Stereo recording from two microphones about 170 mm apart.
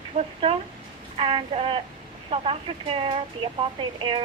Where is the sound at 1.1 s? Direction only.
35° right (ahead or behind).